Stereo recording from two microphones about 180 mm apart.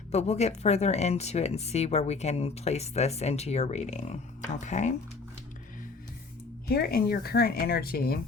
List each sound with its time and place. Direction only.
0.1 s speech: 35° left (ahead or behind)
6.7 s speech: 60° left (ahead or behind)